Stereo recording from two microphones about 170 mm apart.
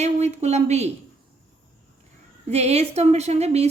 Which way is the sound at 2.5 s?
40° right (ahead or behind).